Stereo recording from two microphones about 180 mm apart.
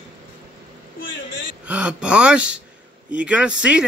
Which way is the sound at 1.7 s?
5° right (ahead or behind).